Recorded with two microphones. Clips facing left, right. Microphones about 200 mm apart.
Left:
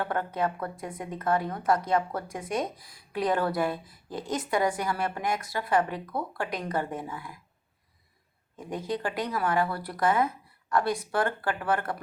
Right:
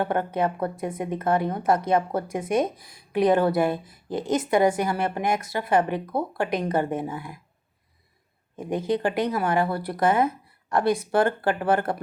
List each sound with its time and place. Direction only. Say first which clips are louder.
0.0 s a woman's voice: right 5 dB; 20° right (ahead or behind)
8.5 s a woman's voice: right 7 dB; 25° right (ahead or behind)